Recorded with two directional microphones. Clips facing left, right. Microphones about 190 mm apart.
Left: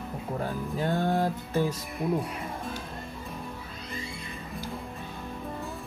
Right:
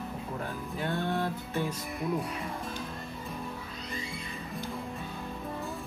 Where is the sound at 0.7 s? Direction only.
40° left (ahead or behind).